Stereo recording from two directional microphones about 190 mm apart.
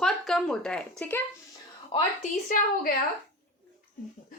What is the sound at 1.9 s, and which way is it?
Speech, 35° left (ahead or behind).